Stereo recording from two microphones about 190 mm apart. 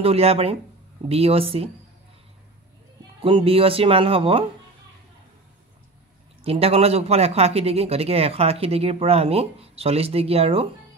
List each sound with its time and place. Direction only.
0.0 s speech: 30° right (ahead or behind)
3.2 s speech: 30° right (ahead or behind)
6.4 s speech: 30° right (ahead or behind)